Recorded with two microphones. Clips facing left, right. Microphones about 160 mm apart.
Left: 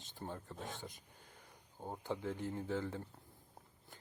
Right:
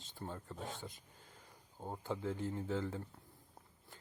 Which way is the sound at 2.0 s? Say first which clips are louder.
Even; 15° left (ahead or behind).